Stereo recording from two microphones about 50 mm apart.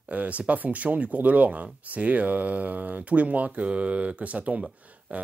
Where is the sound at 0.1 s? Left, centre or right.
Right.